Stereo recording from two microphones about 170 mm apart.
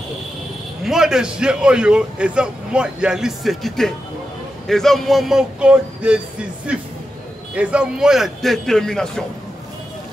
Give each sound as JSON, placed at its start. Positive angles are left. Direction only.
{"t": 0.8, "sound": "a man's voice", "side_deg": -5}